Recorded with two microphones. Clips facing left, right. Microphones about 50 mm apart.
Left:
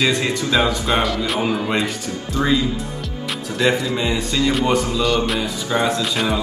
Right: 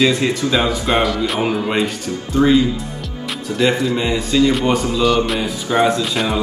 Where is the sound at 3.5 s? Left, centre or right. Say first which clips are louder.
Right 2 dB; centre.